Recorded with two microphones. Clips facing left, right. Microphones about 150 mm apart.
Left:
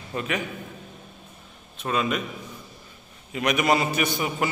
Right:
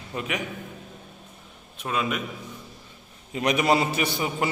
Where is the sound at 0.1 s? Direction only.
15° right (ahead or behind).